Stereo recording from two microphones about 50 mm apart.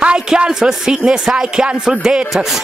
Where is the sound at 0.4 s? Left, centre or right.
Centre.